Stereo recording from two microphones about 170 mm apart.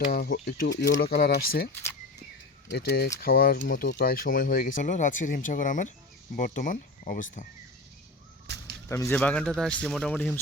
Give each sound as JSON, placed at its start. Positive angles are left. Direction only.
{"t": 0.0, "sound": "speech", "side_deg": 55}
{"t": 0.4, "sound": "speech", "side_deg": 75}
{"t": 2.7, "sound": "speech", "side_deg": 75}
{"t": 3.2, "sound": "speech", "side_deg": 60}
{"t": 8.5, "sound": "a sound", "side_deg": -90}
{"t": 8.9, "sound": "speech", "side_deg": 15}
{"t": 9.1, "sound": "a man's voice", "side_deg": 5}